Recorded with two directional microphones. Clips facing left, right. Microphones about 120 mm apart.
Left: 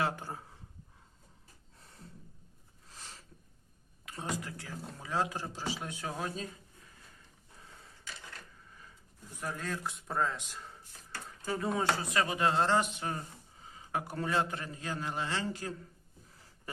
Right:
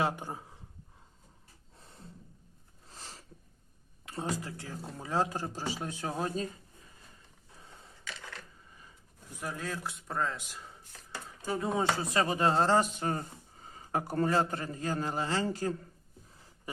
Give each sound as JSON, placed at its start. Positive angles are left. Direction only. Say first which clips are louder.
{"t": 0.0, "sound": "speech", "louder": "right 2 dB", "side_deg": -15}
{"t": 2.9, "sound": "a sound", "louder": "right 2 dB", "side_deg": -35}
{"t": 4.0, "sound": "speech", "louder": "right 3 dB", "side_deg": -30}
{"t": 9.4, "sound": "speech", "louder": "even", "side_deg": -5}
{"t": 11.1, "sound": "speech", "louder": "right 2 dB", "side_deg": -15}